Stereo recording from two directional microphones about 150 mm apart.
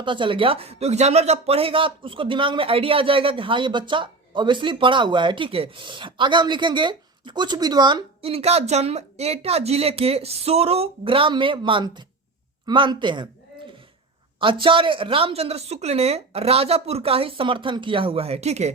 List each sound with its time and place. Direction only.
0.0 s speech: 35° right (ahead or behind)
8.2 s speech: 40° right (ahead or behind)
14.3 s speech: 35° right (ahead or behind)